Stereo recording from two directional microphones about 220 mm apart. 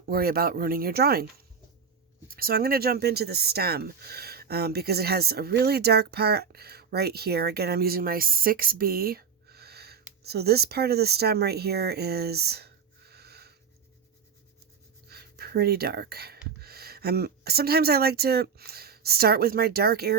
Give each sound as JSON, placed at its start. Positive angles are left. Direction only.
{"t": 0.1, "sound": "speech", "side_deg": -45}
{"t": 15.1, "sound": "a sound", "side_deg": -45}
{"t": 16.6, "sound": "speech", "side_deg": -45}